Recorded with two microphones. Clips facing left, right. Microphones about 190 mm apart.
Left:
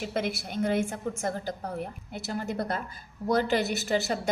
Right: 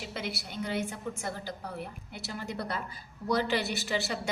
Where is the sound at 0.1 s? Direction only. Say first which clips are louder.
Left 7 dB; 50° left (ahead or behind).